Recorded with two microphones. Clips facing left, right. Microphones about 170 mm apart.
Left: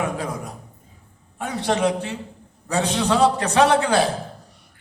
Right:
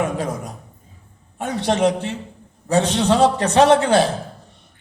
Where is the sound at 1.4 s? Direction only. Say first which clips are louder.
Right 3 dB; 25° right (ahead or behind).